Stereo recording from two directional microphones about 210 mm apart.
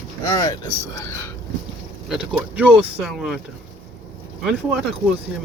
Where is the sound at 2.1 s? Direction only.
Centre (ahead or behind).